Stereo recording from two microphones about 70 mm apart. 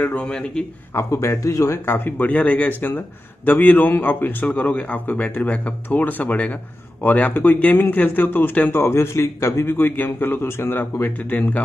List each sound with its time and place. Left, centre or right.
0.0 s a man's voice: centre
0.9 s speech: left
2.0 s a man's voice: left